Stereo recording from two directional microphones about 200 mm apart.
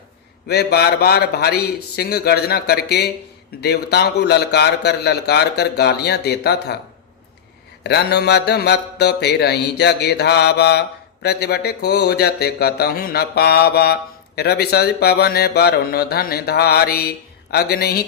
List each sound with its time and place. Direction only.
0.4 s mantra: 55° left (ahead or behind)
3.6 s speech: 55° left (ahead or behind)
7.9 s mantra: 55° left (ahead or behind)